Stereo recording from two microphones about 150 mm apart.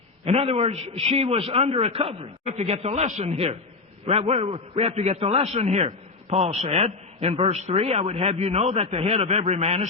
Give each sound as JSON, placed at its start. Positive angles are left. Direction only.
{"t": 0.3, "sound": "a man's voice", "side_deg": -40}